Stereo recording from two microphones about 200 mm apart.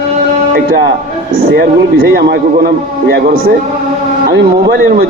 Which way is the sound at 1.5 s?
50° right (ahead or behind).